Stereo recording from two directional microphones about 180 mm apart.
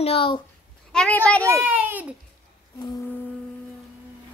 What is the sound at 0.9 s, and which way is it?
Speech, 5° left (ahead or behind).